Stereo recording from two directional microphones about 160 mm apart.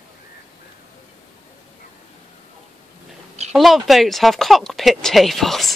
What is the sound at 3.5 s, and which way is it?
Speech, centre (ahead or behind).